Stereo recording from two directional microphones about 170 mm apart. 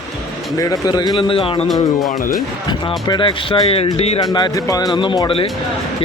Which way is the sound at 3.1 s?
30° left (ahead or behind).